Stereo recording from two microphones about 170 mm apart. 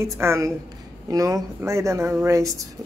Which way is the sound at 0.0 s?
15° right (ahead or behind).